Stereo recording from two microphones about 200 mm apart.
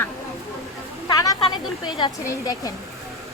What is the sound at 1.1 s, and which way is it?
Speech, 20° left (ahead or behind).